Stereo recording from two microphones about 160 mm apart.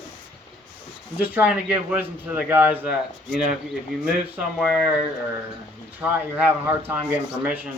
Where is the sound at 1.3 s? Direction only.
10° right (ahead or behind).